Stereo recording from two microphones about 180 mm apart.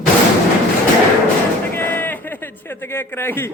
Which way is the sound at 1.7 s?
10° left (ahead or behind).